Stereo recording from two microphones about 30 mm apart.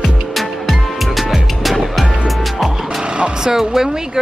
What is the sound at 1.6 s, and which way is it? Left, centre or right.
Music, centre.